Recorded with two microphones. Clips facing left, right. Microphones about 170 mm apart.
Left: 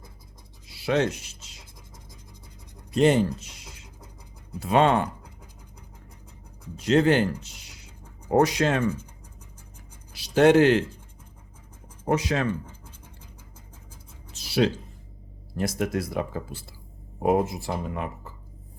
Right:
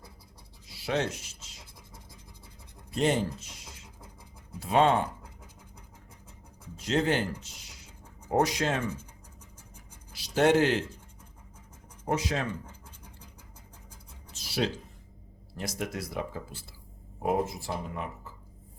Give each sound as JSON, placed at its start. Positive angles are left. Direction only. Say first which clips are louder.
{"t": 0.8, "sound": "rub", "louder": "left 6 dB", "side_deg": 70}
{"t": 2.9, "sound": "speech", "louder": "left 7 dB", "side_deg": 70}
{"t": 4.6, "sound": "speech", "louder": "left 3 dB", "side_deg": 70}
{"t": 6.8, "sound": "speech", "louder": "left 7 dB", "side_deg": 70}
{"t": 10.2, "sound": "speech", "louder": "left 6 dB", "side_deg": 70}
{"t": 12.0, "sound": "speech", "louder": "left 5 dB", "side_deg": 70}
{"t": 14.3, "sound": "music", "louder": "left 7 dB", "side_deg": 65}
{"t": 15.5, "sound": "speech", "louder": "left 8 dB", "side_deg": 55}
{"t": 17.2, "sound": "speech", "louder": "left 6 dB", "side_deg": 75}